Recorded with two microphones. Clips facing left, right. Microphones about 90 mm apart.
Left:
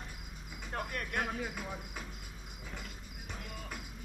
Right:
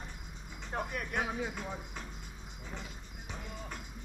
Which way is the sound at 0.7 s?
Centre (ahead or behind).